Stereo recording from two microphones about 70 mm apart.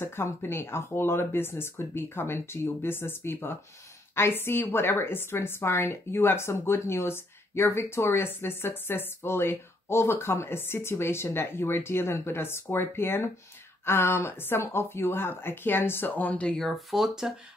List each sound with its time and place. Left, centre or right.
0.0 s speech: left
16.5 s speech: centre